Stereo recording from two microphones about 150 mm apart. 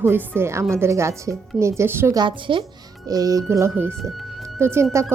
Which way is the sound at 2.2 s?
35° right (ahead or behind).